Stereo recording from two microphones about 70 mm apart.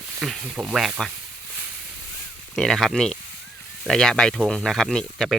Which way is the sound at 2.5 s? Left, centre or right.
Centre.